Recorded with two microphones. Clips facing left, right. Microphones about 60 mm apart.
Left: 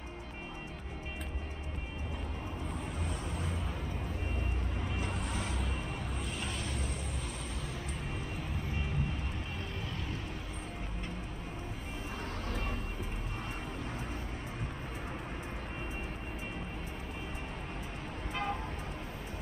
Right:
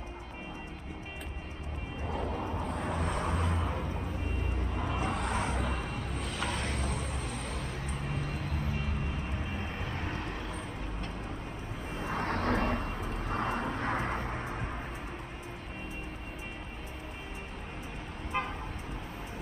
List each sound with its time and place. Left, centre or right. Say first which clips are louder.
2.7 s vehicle: right 6 dB; right
4.7 s music: right 7 dB; right
7.5 s vehicle: right 3 dB; right
9.9 s vehicle: right 4 dB; right
12.0 s vehicle: right 10 dB; right